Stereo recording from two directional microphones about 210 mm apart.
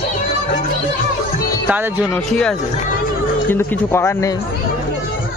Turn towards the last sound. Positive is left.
turn(degrees=10)  # may be behind; listen again after turning